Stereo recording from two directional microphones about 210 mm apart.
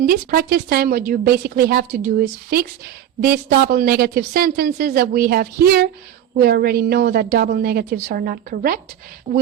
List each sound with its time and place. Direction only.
0.0 s a woman's voice: 45° right (ahead or behind)